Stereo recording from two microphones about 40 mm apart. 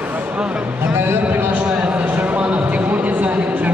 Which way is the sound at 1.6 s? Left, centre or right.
Right.